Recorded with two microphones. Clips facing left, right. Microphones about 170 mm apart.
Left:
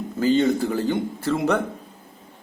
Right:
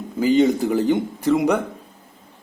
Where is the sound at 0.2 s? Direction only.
15° right (ahead or behind).